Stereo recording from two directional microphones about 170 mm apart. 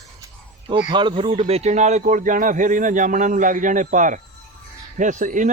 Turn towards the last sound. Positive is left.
turn(degrees=-50)  # may be behind; listen again after turning